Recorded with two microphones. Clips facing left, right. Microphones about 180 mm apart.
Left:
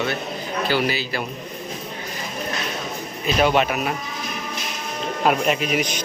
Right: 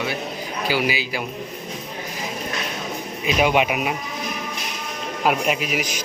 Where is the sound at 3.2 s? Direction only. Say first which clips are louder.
Even; 10° right (ahead or behind).